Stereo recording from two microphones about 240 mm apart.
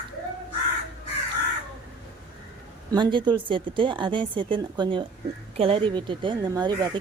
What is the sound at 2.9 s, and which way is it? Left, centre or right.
Speech, centre.